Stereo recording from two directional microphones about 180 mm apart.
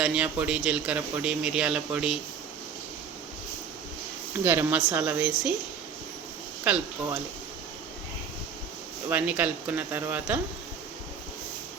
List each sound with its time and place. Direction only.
0.0 s speech: 5° right (ahead or behind)
4.4 s speech: 10° right (ahead or behind)
6.7 s speech: 10° right (ahead or behind)
9.0 s speech: 10° right (ahead or behind)